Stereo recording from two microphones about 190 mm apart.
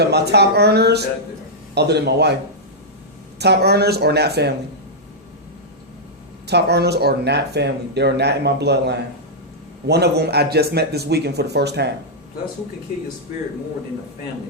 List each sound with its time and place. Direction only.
0.0 s speech: 60° right (ahead or behind)
3.3 s speech: 60° right (ahead or behind)
6.5 s speech: 60° right (ahead or behind)